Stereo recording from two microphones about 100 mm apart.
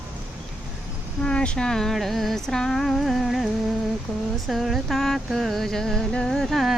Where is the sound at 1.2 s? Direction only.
10° left (ahead or behind).